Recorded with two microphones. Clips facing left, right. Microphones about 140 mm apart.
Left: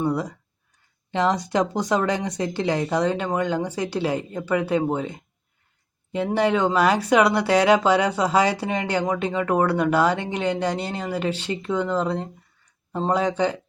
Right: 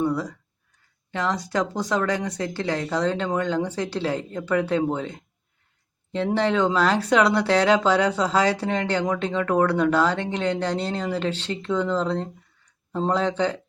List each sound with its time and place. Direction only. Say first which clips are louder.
0.0 s speech: even; 20° left (ahead or behind)
2.9 s speech: left 1 dB; 10° left (ahead or behind)